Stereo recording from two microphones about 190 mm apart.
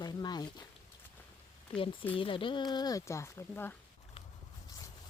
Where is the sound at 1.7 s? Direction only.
30° left (ahead or behind); by 3.8 s 10° left (ahead or behind).